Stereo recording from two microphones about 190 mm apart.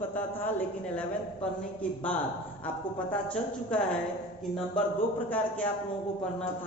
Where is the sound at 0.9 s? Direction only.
5° left (ahead or behind).